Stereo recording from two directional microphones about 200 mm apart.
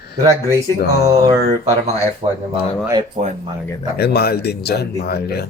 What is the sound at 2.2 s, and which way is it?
Speech, 25° right (ahead or behind).